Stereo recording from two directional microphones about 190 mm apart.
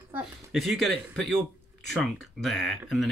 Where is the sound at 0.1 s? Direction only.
Centre (ahead or behind).